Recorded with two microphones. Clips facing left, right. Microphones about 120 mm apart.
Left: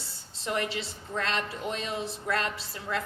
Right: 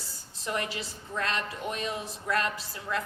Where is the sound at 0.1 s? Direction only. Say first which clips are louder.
Left 1 dB; 30° left (ahead or behind).